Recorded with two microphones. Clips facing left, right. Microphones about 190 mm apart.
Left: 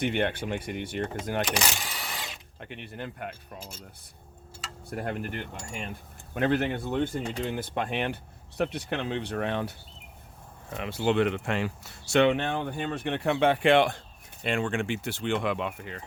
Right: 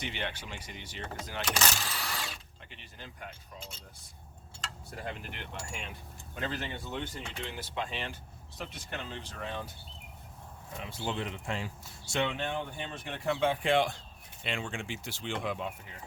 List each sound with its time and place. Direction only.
0.0 s speech: 55° left (ahead or behind)
1.5 s a sound: 15° left (ahead or behind)
2.6 s speech: 60° left (ahead or behind)
4.9 s a sound: 55° left (ahead or behind)
6.3 s speech: 60° left (ahead or behind)
7.2 s speech: 40° left (ahead or behind); by 9.7 s 70° left (ahead or behind)
10.8 s speech: 70° left (ahead or behind)